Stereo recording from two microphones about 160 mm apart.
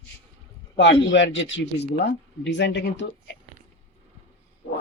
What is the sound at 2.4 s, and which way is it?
Speech, 90° left.